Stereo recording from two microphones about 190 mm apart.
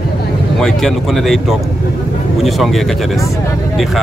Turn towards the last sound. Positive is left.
turn(degrees=0)  # may be behind; listen again after turning